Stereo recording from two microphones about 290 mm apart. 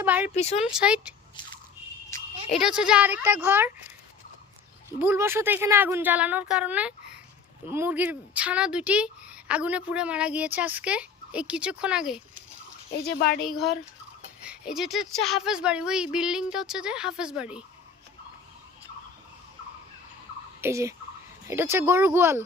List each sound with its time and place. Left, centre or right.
0.0 s a sound: centre
0.3 s speech: left
0.6 s speech: centre
2.6 s speech: centre
4.9 s a woman's voice: centre
13.1 s a woman's voice: left
13.4 s speech: centre
20.6 s a woman's voice: centre